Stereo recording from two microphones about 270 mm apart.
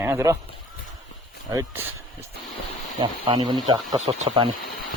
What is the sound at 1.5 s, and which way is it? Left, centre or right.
Speech, centre.